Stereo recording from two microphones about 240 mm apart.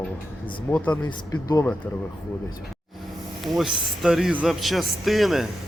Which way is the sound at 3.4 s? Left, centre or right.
Centre.